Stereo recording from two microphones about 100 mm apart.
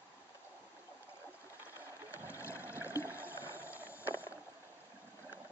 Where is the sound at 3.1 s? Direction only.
15° right (ahead or behind).